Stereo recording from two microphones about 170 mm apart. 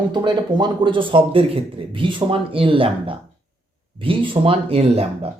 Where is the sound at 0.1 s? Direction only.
25° right (ahead or behind).